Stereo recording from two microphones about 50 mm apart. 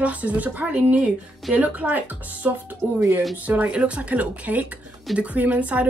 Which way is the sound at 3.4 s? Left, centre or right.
Right.